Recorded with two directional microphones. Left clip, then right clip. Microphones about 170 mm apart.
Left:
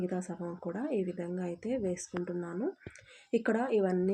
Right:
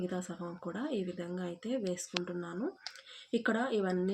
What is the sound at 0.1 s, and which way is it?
Speech, 15° left (ahead or behind).